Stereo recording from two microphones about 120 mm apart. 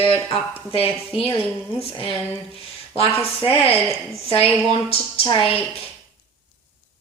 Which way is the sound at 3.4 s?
55° left (ahead or behind).